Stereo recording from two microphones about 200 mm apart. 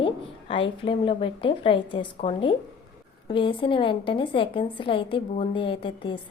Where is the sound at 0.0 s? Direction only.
25° left (ahead or behind).